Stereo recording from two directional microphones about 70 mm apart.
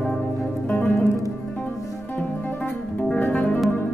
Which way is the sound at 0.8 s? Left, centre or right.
Left.